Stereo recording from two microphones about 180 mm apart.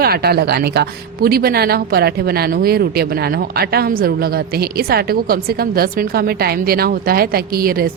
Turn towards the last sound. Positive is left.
turn(degrees=-55)  # may be behind; listen again after turning